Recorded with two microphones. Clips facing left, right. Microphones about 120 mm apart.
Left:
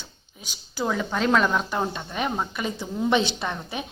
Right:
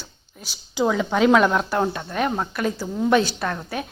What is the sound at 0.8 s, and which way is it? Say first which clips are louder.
Speech: right 6 dB; 5° right (ahead or behind).